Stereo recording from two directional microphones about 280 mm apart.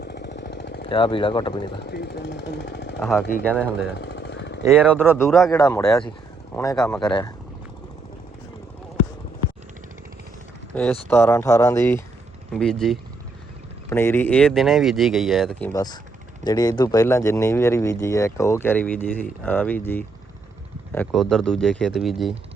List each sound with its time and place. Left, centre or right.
0.0 s jackhammer: left
0.9 s a man's voice: centre
1.8 s speech: left
3.0 s speech: centre
3.9 s jackhammer: left
4.6 s speech: centre
5.1 s a man's voice: centre
11.1 s a man's voice: centre
15.7 s a man's voice: centre